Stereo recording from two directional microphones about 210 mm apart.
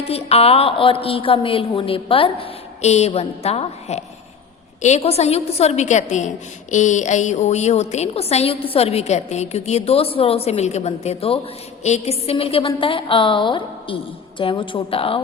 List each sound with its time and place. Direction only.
0.1 s a woman's voice: 30° left (ahead or behind)